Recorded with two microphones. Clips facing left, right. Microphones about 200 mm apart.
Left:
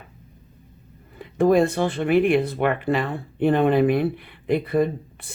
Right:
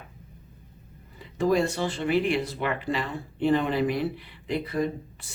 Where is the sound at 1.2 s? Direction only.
55° left (ahead or behind).